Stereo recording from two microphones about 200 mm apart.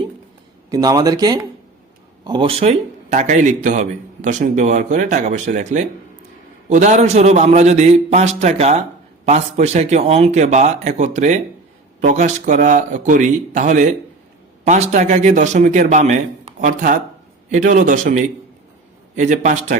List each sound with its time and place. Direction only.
0.7 s speech: 20° right (ahead or behind); by 19.7 s 40° right (ahead or behind)